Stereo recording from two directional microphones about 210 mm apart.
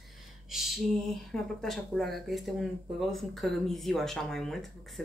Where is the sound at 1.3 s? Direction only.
Centre (ahead or behind).